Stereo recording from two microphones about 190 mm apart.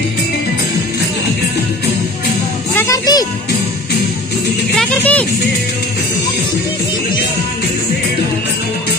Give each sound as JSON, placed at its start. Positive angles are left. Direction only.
{"t": 2.7, "sound": "music", "side_deg": 15}
{"t": 4.7, "sound": "music", "side_deg": 5}